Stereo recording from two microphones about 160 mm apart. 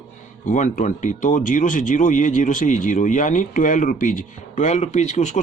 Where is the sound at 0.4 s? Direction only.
50° left (ahead or behind).